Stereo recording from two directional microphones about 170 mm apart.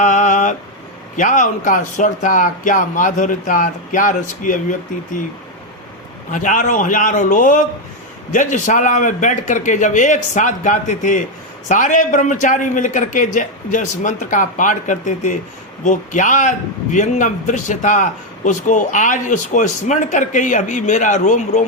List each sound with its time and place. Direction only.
0.0 s a sound: 45° left (ahead or behind)
1.1 s a man's voice: 50° left (ahead or behind)
6.3 s a man's voice: 50° left (ahead or behind)